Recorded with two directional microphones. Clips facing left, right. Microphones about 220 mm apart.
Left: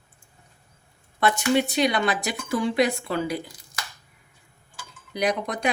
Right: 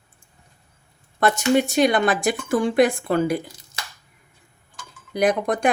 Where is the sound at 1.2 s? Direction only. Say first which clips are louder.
Right 3 dB; 45° right (ahead or behind).